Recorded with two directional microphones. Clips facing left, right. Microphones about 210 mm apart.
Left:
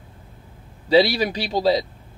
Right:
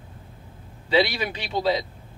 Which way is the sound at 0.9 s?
35° left (ahead or behind).